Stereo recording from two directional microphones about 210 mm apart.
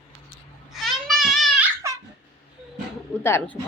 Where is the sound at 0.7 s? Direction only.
Centre (ahead or behind).